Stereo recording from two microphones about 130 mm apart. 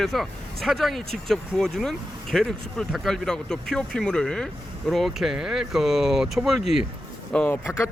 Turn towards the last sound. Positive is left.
turn(degrees=15)  # may be behind; listen again after turning